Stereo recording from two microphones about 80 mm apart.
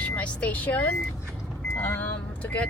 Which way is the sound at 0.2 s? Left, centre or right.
Centre.